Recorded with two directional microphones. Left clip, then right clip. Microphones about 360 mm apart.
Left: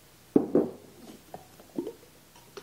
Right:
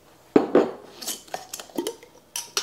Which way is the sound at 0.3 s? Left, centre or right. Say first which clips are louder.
Right 6 dB; centre.